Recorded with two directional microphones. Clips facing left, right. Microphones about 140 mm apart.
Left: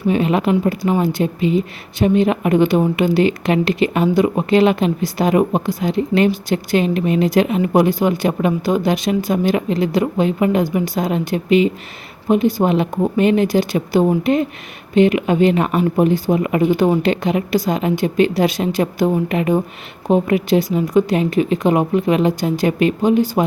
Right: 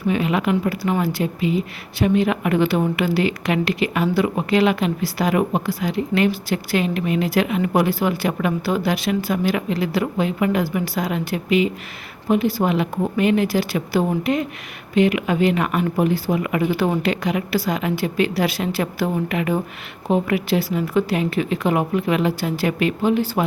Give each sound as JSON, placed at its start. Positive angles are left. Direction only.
{"t": 0.1, "sound": "speech", "side_deg": 30}